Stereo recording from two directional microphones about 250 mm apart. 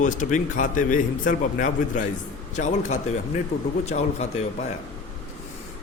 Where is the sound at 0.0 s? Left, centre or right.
Left.